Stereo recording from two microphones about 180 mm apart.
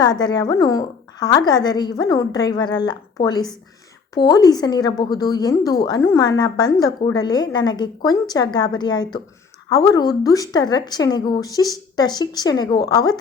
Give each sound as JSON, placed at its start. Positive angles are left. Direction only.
{"t": 0.0, "sound": "a woman's voice", "side_deg": 25}